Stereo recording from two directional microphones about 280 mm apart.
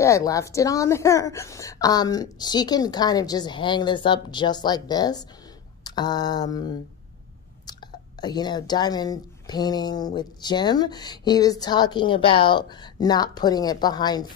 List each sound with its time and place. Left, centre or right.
0.0 s speech: centre